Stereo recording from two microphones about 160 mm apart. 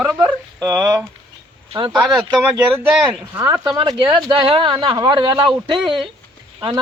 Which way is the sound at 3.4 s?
25° right (ahead or behind).